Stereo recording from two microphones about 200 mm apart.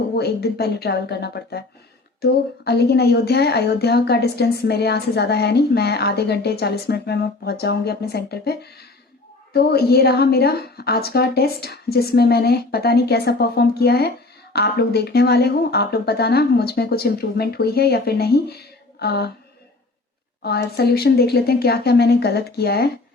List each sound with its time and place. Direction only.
0.2 s a woman's voice: 55° left (ahead or behind)
20.4 s a woman's voice: 55° left (ahead or behind)